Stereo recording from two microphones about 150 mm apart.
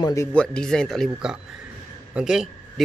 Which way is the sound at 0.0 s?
20° left (ahead or behind).